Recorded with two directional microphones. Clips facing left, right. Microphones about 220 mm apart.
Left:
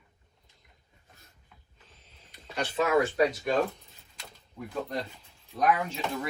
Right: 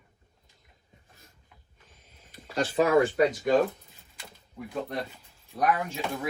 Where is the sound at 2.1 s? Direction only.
45° right (ahead or behind).